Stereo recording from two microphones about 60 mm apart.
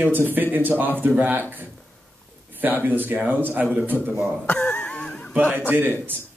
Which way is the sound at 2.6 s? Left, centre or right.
Right.